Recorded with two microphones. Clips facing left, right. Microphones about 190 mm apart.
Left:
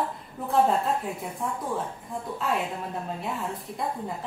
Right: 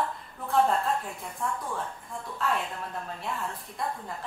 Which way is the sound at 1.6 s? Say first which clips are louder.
Left 4 dB; 20° left (ahead or behind).